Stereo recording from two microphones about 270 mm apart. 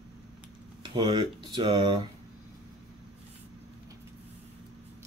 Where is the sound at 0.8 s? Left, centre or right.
Centre.